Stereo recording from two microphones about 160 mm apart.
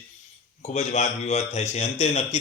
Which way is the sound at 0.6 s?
45° left (ahead or behind).